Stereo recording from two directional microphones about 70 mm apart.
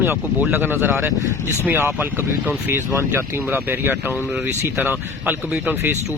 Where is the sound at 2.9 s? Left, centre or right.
Right.